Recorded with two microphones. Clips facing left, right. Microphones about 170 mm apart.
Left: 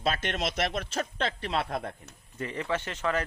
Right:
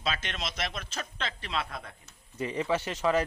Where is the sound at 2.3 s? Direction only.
15° right (ahead or behind).